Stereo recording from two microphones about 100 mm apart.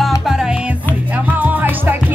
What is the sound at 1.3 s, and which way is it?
Music, 20° right (ahead or behind).